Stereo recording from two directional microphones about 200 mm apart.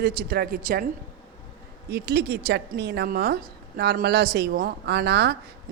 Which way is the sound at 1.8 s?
50° right (ahead or behind).